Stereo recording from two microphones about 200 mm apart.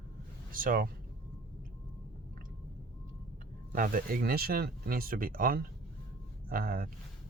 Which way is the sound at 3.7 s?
45° right (ahead or behind).